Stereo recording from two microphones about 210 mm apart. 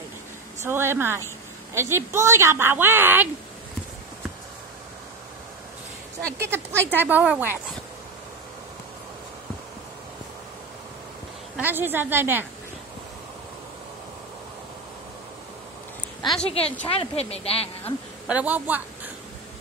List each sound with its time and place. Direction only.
0.7 s a woman's voice: 10° right (ahead or behind)
6.3 s a woman's voice: 10° right (ahead or behind)
11.5 s a woman's voice: 10° right (ahead or behind)
16.4 s speech: 30° left (ahead or behind)
18.2 s a woman's voice: 5° right (ahead or behind)